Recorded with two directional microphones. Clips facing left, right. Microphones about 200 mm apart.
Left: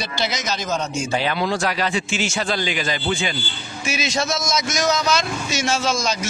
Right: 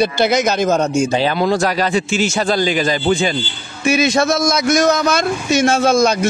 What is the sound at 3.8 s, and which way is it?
A man's voice, 60° right (ahead or behind).